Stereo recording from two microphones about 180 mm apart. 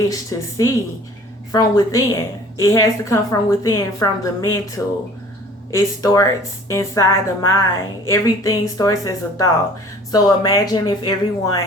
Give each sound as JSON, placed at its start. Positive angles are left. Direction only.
{"t": 0.0, "sound": "a woman's voice", "side_deg": 20}
{"t": 5.7, "sound": "a woman's voice", "side_deg": 20}